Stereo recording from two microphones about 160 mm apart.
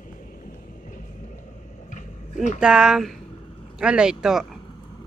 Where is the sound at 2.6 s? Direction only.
5° right (ahead or behind).